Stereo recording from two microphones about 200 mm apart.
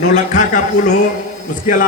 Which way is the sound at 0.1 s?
40° left (ahead or behind).